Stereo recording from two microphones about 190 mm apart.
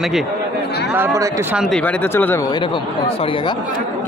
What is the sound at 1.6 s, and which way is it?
Speech, 5° left (ahead or behind).